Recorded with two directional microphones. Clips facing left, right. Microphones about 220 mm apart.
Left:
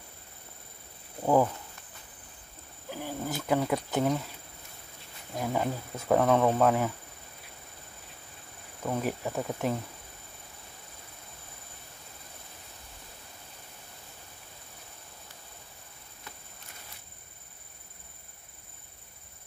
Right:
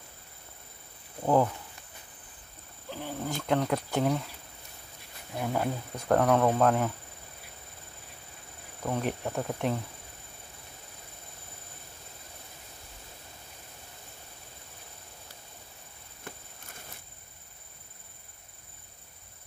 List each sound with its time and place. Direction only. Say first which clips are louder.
1.2 s speech: left 1 dB; 5° left (ahead or behind)
2.9 s speech: even; 10° left (ahead or behind)
5.4 s speech: even; 5° left (ahead or behind)
8.8 s speech: even; 5° left (ahead or behind)
16.3 s a sound: right 6 dB; 50° right (ahead or behind)